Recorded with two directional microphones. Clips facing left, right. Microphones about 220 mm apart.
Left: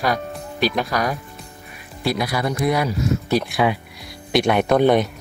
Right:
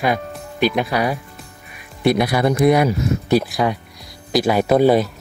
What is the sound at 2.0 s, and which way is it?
Speech, 25° right (ahead or behind).